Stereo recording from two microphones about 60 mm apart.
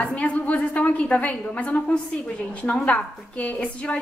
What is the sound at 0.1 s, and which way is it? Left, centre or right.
A woman's voice, left.